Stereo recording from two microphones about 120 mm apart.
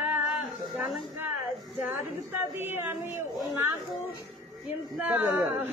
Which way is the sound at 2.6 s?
20° right (ahead or behind).